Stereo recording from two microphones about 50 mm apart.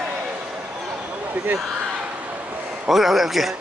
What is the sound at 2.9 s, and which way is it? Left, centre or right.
Speech, centre.